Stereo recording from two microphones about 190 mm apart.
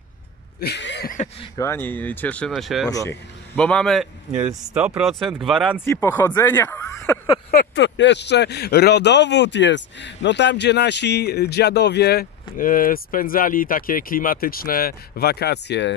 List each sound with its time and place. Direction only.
0.6 s a sound: 65° left (ahead or behind)
1.6 s speech: 10° left (ahead or behind)
2.9 s speech: 15° left (ahead or behind)
3.5 s speech: 5° left (ahead or behind)
4.4 s speech: 10° right (ahead or behind)
5.9 s speech: 10° left (ahead or behind)
7.5 s a man's voice: 65° left (ahead or behind)